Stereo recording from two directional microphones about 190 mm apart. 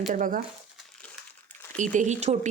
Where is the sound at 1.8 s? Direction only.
40° right (ahead or behind).